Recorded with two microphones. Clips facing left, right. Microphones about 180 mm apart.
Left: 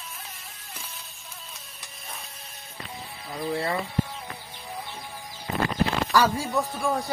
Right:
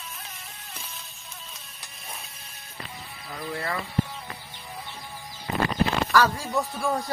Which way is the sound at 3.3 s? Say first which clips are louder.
Left 4 dB; 20° left (ahead or behind).